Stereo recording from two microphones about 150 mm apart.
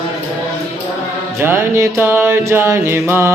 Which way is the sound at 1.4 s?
15° right (ahead or behind).